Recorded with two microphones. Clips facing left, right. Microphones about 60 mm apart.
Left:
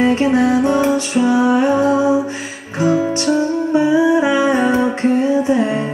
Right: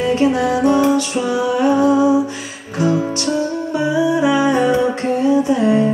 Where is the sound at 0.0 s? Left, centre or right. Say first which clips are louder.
Left 2 dB; left.